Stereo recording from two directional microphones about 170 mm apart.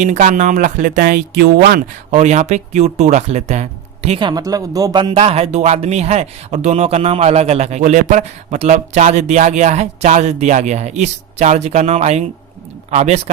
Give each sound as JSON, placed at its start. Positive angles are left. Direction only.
{"t": 0.0, "sound": "speech", "side_deg": -45}
{"t": 2.0, "sound": "speech", "side_deg": -40}
{"t": 5.1, "sound": "speech", "side_deg": -35}